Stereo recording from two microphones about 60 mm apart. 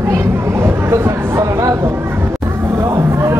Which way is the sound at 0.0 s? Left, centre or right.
Right.